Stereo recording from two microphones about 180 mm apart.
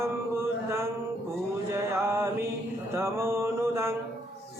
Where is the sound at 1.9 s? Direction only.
15° right (ahead or behind).